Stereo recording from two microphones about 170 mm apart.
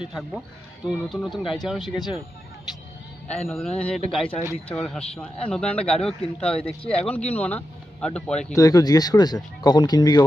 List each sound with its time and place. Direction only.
0.0 s a man's voice: centre (ahead or behind)
3.3 s a man's voice: centre (ahead or behind)
8.5 s speech: 20° left (ahead or behind)